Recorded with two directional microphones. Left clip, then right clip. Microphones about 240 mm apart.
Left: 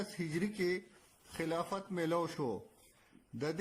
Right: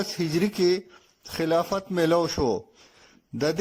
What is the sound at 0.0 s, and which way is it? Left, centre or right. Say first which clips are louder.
Speech: right 13 dB; right.